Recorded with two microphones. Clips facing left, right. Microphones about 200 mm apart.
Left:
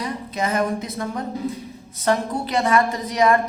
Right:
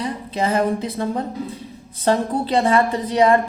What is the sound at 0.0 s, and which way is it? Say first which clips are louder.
A woman's voice: right 3 dB; 30° right (ahead or behind).